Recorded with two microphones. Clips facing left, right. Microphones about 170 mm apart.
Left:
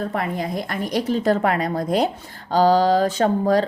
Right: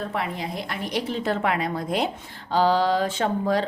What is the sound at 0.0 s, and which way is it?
A woman's voice, 45° left (ahead or behind).